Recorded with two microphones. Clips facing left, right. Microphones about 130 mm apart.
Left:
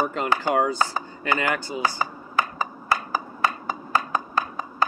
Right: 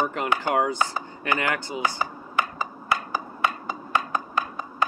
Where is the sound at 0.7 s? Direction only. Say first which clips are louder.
Left 1 dB; 20° right (ahead or behind).